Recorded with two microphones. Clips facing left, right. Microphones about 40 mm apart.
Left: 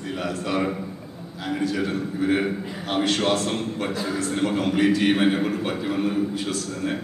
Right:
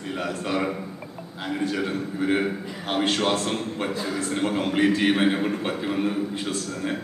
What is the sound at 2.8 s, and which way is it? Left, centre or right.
A woman's voice, right.